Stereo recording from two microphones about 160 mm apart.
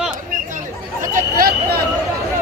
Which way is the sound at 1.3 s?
65° right (ahead or behind).